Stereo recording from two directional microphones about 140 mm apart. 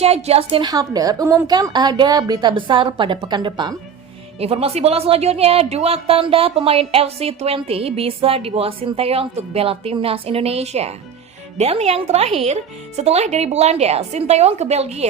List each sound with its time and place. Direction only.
0.0 s speech: 45° right (ahead or behind)
0.6 s a woman's voice: 25° right (ahead or behind)
4.4 s speech: 45° right (ahead or behind)